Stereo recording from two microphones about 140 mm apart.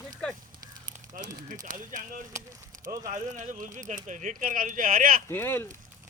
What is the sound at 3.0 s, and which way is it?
Speech, 65° right (ahead or behind).